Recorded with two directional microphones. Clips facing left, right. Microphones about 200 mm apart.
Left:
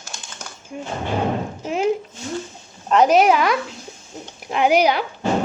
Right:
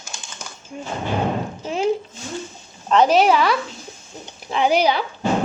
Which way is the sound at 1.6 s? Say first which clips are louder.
Left 1 dB; 15° left (ahead or behind).